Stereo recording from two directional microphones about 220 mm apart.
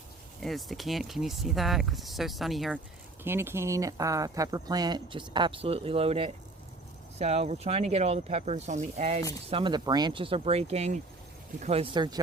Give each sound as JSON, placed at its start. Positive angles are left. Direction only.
{"t": 0.3, "sound": "speech", "side_deg": 0}
{"t": 3.2, "sound": "speech", "side_deg": -10}